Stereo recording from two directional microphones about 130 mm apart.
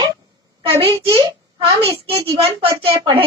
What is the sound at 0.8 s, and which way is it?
A child's voice, 40° right (ahead or behind).